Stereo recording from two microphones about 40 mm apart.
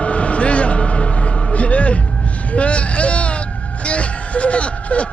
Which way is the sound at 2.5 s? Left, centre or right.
Left.